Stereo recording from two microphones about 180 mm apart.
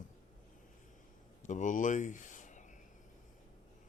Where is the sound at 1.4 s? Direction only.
45° left (ahead or behind).